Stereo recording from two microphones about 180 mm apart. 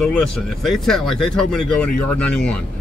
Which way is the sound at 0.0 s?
Centre (ahead or behind).